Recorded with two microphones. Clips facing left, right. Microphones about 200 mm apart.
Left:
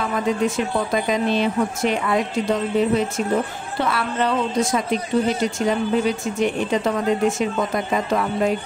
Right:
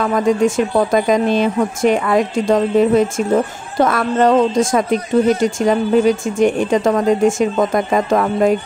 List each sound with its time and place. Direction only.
0.0 s speech: 45° right (ahead or behind)